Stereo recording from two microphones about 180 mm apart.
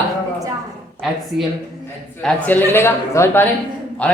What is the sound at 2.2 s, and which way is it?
A man's voice, 10° left (ahead or behind).